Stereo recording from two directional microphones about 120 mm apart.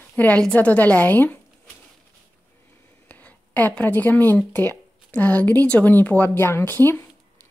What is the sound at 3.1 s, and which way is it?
Speech, 15° left (ahead or behind).